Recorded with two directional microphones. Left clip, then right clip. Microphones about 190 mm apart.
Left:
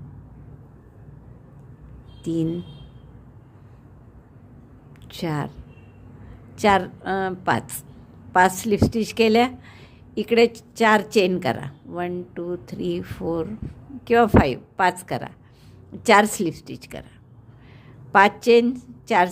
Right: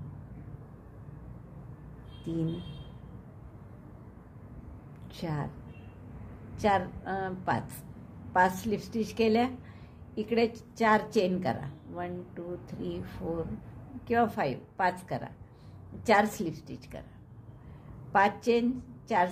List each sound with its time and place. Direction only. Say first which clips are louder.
5.0 s a woman's voice: left 9 dB; 40° left (ahead or behind)
6.6 s a woman's voice: left 9 dB; 40° left (ahead or behind)
18.1 s a woman's voice: left 10 dB; 40° left (ahead or behind)